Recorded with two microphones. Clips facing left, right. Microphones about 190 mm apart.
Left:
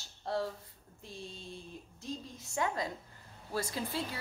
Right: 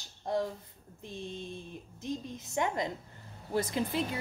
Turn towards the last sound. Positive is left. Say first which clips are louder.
# right 5 dB
turn(degrees=-20)  # may be behind; listen again after turning